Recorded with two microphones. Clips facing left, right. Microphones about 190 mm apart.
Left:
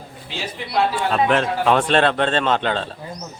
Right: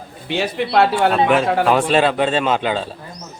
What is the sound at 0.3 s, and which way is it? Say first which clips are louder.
Speech: right 10 dB; 65° right (ahead or behind).